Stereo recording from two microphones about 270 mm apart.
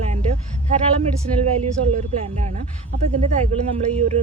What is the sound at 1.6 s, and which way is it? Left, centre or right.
Speech, right.